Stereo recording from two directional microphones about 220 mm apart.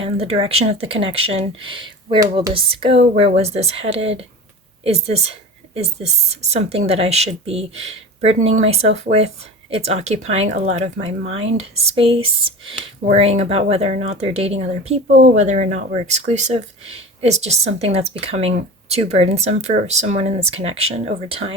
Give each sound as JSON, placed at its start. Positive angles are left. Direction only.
{"t": 0.0, "sound": "speech", "side_deg": -25}
{"t": 2.5, "sound": "speech", "side_deg": -25}